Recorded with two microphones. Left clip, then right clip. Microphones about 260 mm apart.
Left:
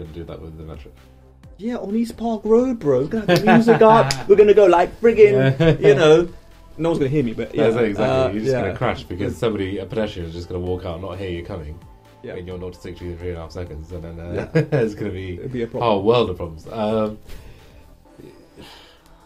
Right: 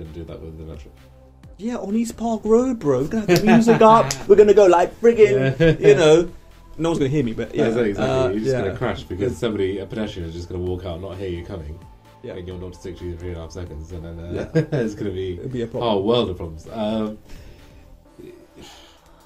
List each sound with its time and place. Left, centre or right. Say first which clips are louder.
1.6 s speech: left 1 dB; right
3.5 s speech: left 3 dB; left
3.8 s speech: even; centre
5.3 s speech: left 1 dB; left
5.9 s speech: left 1 dB; centre
8.7 s speech: left 2 dB; left
15.5 s a man's voice: left 4 dB; centre
15.8 s speech: left 3 dB; left